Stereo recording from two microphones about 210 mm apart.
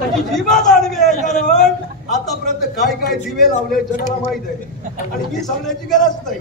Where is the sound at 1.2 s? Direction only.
35° left (ahead or behind).